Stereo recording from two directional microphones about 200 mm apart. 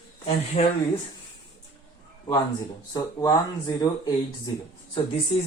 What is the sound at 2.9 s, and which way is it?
Speech, 20° left (ahead or behind).